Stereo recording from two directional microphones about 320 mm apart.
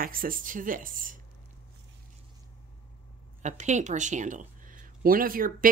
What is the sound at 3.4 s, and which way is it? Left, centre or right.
Speech, right.